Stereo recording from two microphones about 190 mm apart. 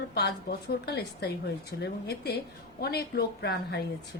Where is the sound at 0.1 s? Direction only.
55° left (ahead or behind).